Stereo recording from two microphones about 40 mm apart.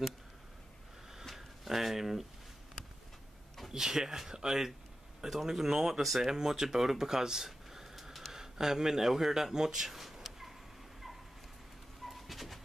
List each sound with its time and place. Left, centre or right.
1.2 s a sound: centre
3.7 s speech: centre
8.3 s speech: centre
12.0 s bird: centre